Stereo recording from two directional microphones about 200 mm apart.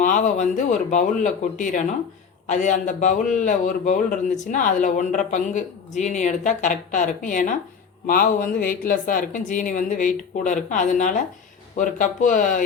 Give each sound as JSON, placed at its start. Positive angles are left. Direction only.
{"t": 0.0, "sound": "a man's voice", "side_deg": 40}